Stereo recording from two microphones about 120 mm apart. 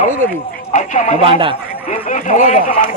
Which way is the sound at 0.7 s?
90° left.